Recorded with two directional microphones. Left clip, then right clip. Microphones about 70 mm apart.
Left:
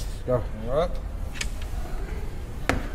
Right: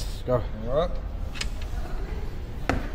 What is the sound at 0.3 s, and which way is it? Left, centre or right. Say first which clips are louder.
Speech: even; right.